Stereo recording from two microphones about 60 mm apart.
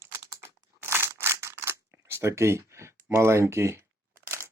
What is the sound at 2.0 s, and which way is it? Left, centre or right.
Speech, right.